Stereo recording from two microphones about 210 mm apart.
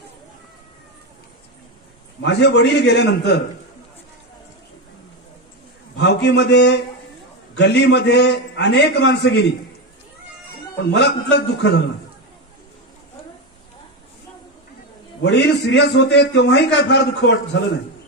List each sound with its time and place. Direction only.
2.2 s a man's voice: 55° left (ahead or behind)
5.9 s a man's voice: 55° left (ahead or behind)
10.8 s a man's voice: 55° left (ahead or behind)
15.2 s a man's voice: 55° left (ahead or behind)